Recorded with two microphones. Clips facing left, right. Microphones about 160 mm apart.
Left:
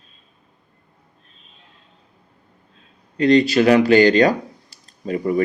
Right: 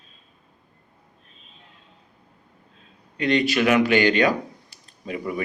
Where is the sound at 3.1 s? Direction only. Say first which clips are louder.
Left 7 dB; 35° left (ahead or behind).